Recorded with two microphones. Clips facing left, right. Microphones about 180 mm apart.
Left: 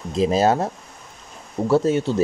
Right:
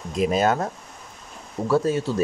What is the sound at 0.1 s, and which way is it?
Speech, 30° left (ahead or behind).